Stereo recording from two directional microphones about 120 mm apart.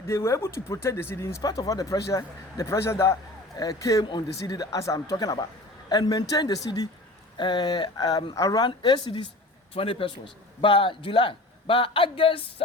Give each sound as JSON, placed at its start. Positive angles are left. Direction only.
{"t": 0.1, "sound": "a man's voice", "side_deg": 20}